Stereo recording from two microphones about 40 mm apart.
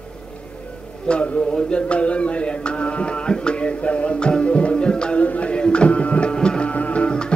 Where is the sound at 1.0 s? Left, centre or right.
Left.